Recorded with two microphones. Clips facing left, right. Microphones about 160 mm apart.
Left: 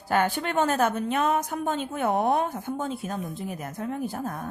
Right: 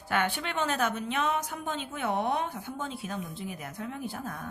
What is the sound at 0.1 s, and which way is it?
A woman's voice, 40° left (ahead or behind).